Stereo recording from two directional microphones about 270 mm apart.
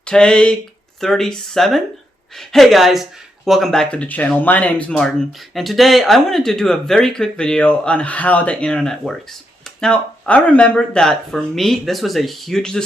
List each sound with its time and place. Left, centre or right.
0.0 s speech: centre